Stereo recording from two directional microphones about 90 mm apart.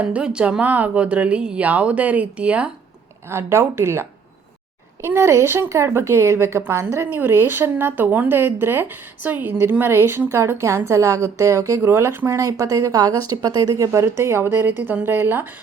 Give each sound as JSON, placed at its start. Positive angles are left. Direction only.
{"t": 0.0, "sound": "speech", "side_deg": -15}
{"t": 3.2, "sound": "a woman's voice", "side_deg": -30}
{"t": 5.0, "sound": "a woman's voice", "side_deg": -25}
{"t": 12.4, "sound": "a woman's voice", "side_deg": -40}